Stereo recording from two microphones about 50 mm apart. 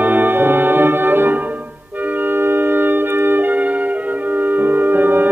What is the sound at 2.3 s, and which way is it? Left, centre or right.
Music, right.